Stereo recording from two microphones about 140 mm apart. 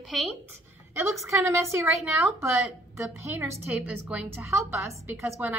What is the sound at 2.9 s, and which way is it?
A woman's voice, 20° right (ahead or behind).